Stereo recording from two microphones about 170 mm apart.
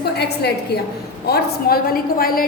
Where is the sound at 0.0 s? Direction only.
70° left (ahead or behind).